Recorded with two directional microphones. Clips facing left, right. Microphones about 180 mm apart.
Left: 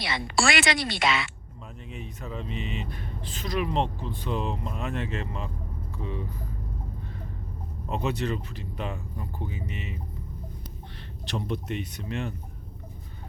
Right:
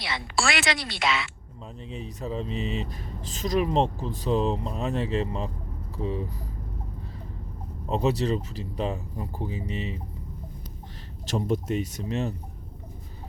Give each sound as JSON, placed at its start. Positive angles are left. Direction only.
{"t": 0.0, "sound": "a woman's voice", "side_deg": 0}
{"t": 1.9, "sound": "speech", "side_deg": -30}
{"t": 7.9, "sound": "speech", "side_deg": -35}
{"t": 11.3, "sound": "speech", "side_deg": -40}